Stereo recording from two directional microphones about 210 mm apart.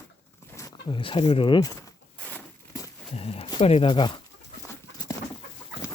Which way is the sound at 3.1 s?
30° left (ahead or behind).